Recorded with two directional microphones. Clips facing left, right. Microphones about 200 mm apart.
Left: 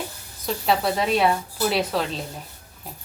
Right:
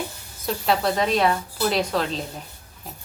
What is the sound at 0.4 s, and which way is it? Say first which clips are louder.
A woman's voice: even; centre (ahead or behind).